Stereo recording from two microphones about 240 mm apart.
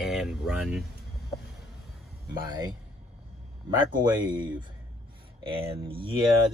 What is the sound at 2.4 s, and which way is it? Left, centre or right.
Speech, centre.